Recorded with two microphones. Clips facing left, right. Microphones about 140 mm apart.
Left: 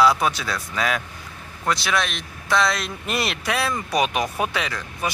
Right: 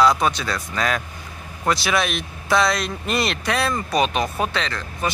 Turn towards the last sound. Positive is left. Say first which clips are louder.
# right 1 dB
turn(degrees=10)  # may be behind; listen again after turning